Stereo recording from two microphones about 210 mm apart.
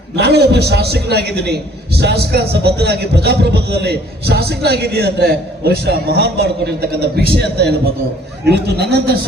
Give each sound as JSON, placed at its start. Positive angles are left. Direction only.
{"t": 0.2, "sound": "a man's voice", "side_deg": -50}